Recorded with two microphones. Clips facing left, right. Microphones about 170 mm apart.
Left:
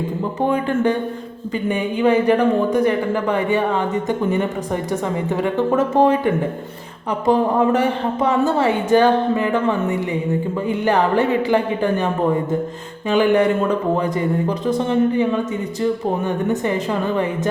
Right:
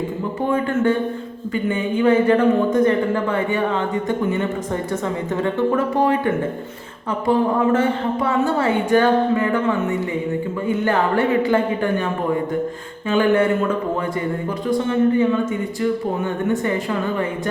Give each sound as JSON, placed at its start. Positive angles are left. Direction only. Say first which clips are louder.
{"t": 1.7, "sound": "speech", "louder": "even", "side_deg": 15}
{"t": 10.7, "sound": "speech", "louder": "left 1 dB", "side_deg": 15}
{"t": 13.1, "sound": "speech", "louder": "left 1 dB", "side_deg": 15}